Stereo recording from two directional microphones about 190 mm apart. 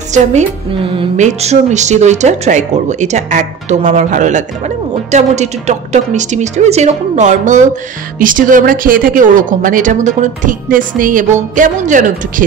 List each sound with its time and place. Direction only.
0.1 s a woman's voice: 35° right (ahead or behind)